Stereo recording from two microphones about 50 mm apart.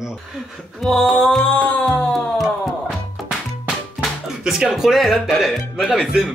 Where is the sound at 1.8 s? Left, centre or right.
Centre.